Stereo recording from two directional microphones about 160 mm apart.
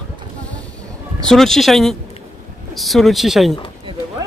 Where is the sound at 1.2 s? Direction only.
Centre (ahead or behind).